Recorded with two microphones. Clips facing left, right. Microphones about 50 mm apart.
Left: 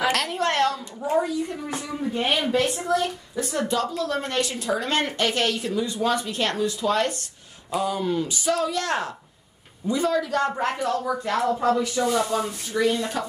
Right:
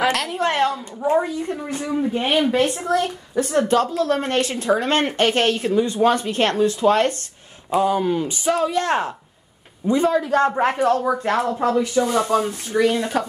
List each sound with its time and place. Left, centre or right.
0.1 s a sound: centre
0.4 s a woman's voice: centre
2.5 s a woman's voice: right
2.9 s a woman's voice: right
12.1 s speech: right